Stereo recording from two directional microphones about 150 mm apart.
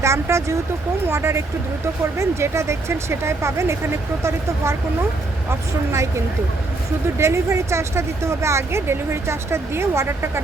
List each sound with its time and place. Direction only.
0.0 s speech: 20° right (ahead or behind)
7.2 s speech: 20° right (ahead or behind)